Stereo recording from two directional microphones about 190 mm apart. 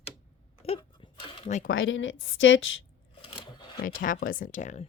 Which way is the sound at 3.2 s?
30° left (ahead or behind).